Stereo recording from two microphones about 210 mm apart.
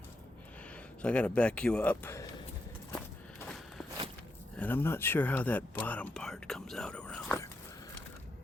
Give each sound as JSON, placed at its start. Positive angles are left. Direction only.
{"t": 1.0, "sound": "speech", "side_deg": 5}
{"t": 4.5, "sound": "speech", "side_deg": 10}